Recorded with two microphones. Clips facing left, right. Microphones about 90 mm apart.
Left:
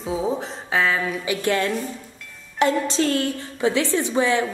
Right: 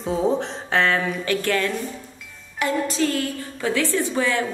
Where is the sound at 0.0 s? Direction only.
Centre (ahead or behind).